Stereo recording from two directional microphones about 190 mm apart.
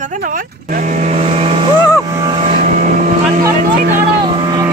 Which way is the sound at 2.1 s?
20° right (ahead or behind).